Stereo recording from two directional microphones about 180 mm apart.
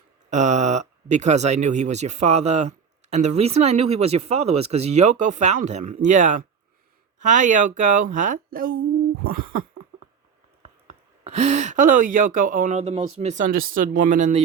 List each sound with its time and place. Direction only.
0.3 s speech: 40° right (ahead or behind)
11.2 s speech: 40° right (ahead or behind)